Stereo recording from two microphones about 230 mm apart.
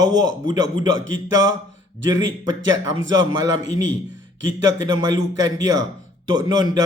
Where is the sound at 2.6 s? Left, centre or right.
Right.